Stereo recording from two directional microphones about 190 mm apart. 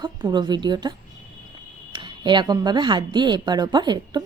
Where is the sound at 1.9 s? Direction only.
25° right (ahead or behind).